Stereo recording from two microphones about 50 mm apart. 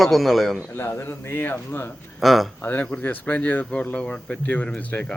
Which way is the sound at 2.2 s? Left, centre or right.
Centre.